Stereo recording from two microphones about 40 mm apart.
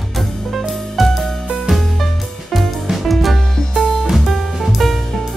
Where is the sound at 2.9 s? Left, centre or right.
Centre.